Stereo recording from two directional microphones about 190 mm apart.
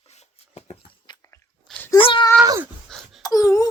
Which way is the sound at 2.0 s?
25° left (ahead or behind).